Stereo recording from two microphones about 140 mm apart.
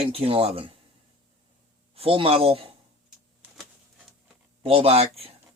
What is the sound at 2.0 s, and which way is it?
Speech, 40° right (ahead or behind).